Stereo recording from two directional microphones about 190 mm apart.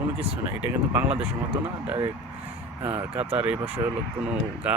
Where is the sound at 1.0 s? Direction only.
5° right (ahead or behind).